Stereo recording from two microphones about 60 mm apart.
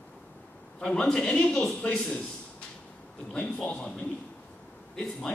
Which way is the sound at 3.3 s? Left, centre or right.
Centre.